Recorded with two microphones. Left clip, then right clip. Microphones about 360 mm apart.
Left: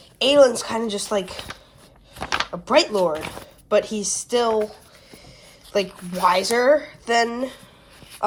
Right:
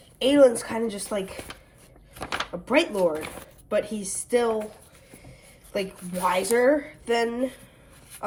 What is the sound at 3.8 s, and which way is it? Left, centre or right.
Speech, centre.